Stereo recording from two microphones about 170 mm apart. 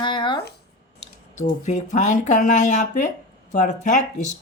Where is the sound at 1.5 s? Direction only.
45° left (ahead or behind).